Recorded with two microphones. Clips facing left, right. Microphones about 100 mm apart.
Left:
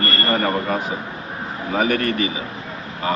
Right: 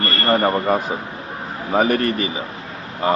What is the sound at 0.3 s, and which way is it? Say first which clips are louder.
Speech: right 5 dB; 30° right (ahead or behind).